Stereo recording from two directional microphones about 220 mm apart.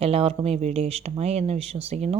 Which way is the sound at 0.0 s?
25° right (ahead or behind).